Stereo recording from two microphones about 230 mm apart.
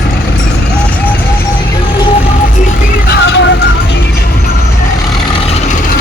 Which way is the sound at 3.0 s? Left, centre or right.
Left.